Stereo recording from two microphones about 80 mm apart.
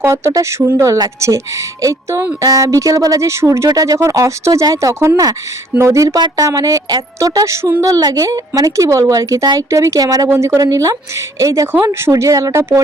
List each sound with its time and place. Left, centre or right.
0.0 s speech: right
1.8 s speech: right
3.7 s speech: right
6.1 s speech: right
10.2 s speech: right